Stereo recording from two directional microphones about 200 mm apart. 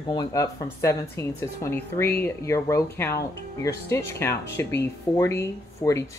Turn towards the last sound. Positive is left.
turn(degrees=15)  # may be behind; listen again after turning